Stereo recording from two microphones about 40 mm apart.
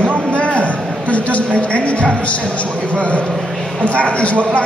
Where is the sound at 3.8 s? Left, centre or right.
Left.